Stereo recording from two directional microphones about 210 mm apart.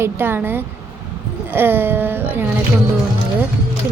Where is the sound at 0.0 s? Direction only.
10° right (ahead or behind).